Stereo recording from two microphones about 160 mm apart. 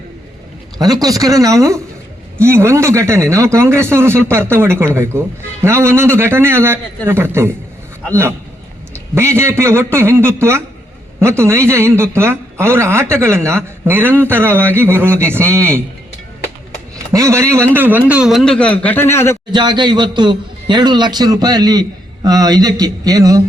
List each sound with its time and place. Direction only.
0.8 s a man's voice: 25° right (ahead or behind)
9.1 s speech: 15° right (ahead or behind)
17.1 s a man's voice: 20° right (ahead or behind); by 19.4 s 15° left (ahead or behind)
19.5 s a man's voice: 30° right (ahead or behind)